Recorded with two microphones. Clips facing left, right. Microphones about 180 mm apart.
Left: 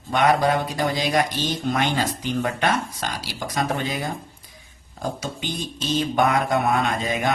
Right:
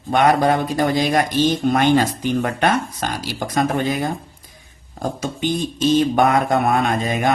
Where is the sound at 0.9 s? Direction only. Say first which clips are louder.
Right 5 dB; 55° right (ahead or behind).